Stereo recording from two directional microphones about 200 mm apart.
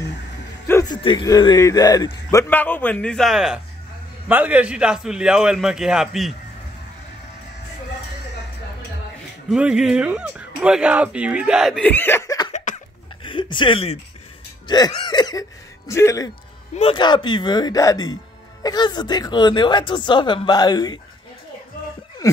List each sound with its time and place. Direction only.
0.7 s music: 15° left (ahead or behind)
1.0 s a man's voice: 20° left (ahead or behind); by 6.3 s centre (ahead or behind)
9.5 s speech: 5° right (ahead or behind); by 12.5 s 20° left (ahead or behind)
13.2 s a sound: 25° left (ahead or behind)
14.7 s a man's voice: 20° left (ahead or behind)
16.7 s speech: 25° left (ahead or behind)
22.2 s a sound: 15° left (ahead or behind)